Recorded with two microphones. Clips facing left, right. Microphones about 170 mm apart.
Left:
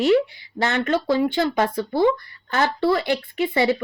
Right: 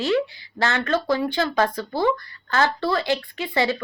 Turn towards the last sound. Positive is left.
turn(degrees=20)  # may be behind; listen again after turning